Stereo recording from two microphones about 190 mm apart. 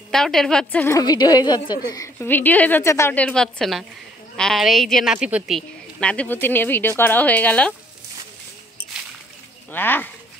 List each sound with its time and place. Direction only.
0.1 s a woman's voice: 5° left (ahead or behind); by 2.0 s 20° left (ahead or behind)
2.1 s a woman's voice: 10° left (ahead or behind)
9.7 s a woman's voice: 10° left (ahead or behind)